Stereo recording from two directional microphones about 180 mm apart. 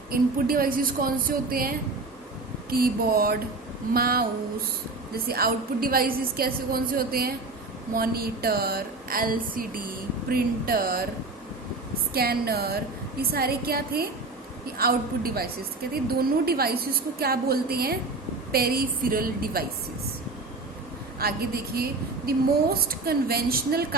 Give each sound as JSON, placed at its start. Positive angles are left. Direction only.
{"t": 0.1, "sound": "a woman's voice", "side_deg": -55}
{"t": 12.1, "sound": "a woman's voice", "side_deg": -60}
{"t": 21.2, "sound": "a woman's voice", "side_deg": -55}